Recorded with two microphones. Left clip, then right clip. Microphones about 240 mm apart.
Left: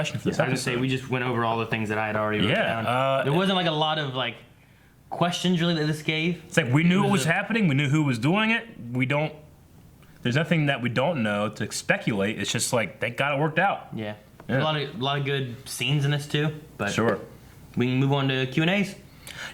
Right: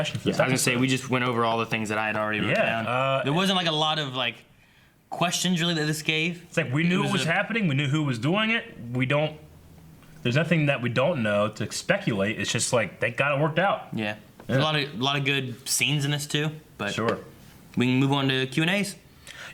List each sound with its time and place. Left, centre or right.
0.4 s a man's voice: left
2.8 s mantra: right
3.2 s a man's voice: left
6.5 s speech: right
13.9 s speech: left
19.3 s a sound: right